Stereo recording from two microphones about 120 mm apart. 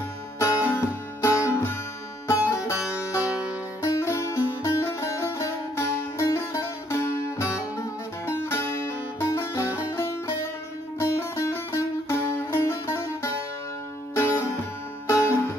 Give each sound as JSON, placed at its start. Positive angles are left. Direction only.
{"t": 0.4, "sound": "music", "side_deg": 25}